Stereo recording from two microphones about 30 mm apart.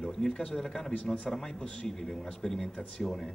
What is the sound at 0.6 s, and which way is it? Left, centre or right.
A man's voice, centre.